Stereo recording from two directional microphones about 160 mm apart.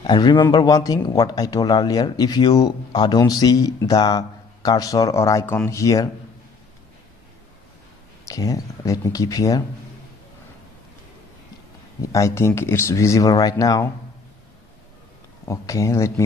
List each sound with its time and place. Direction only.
0.0 s speech: 30° left (ahead or behind)
8.3 s speech: 20° left (ahead or behind)
12.0 s speech: 20° left (ahead or behind)
15.4 s speech: 20° left (ahead or behind)